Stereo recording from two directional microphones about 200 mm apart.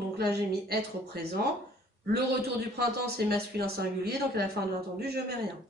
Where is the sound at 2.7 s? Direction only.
50° right (ahead or behind).